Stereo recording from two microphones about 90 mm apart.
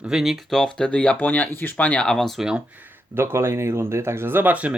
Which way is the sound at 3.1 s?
25° right (ahead or behind).